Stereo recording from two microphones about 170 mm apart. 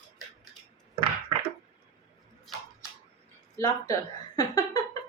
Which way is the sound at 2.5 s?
Centre (ahead or behind).